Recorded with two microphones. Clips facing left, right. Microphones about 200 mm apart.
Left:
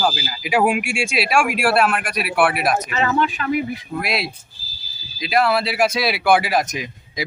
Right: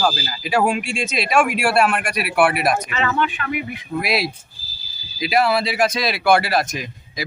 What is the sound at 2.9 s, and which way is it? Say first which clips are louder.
Speech: left 2 dB; 35° left (ahead or behind).